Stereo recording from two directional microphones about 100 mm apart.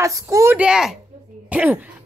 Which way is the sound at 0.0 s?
30° right (ahead or behind).